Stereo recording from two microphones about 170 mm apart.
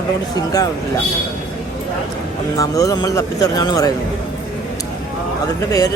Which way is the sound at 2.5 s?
20° left (ahead or behind).